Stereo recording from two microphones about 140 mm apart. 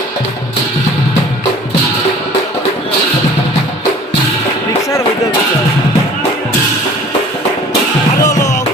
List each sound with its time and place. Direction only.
8.2 s music: 25° left (ahead or behind)